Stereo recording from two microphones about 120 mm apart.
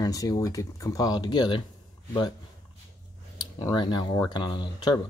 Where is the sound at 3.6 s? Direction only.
40° left (ahead or behind).